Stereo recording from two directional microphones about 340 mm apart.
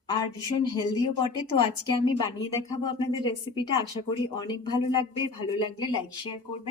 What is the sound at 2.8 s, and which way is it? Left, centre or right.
Speech, centre.